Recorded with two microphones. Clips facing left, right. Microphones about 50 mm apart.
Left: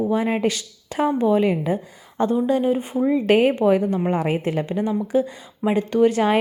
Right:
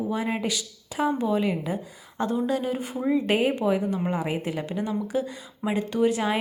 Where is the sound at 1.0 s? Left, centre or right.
Left.